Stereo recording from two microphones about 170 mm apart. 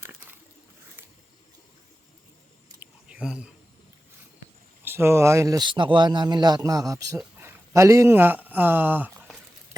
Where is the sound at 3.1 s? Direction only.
5° right (ahead or behind).